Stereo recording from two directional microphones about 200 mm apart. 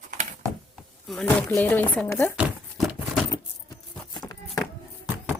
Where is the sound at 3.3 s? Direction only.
20° left (ahead or behind).